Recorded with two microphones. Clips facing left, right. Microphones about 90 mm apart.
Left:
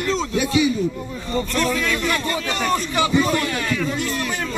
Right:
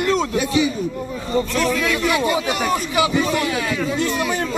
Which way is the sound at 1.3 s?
5° right (ahead or behind).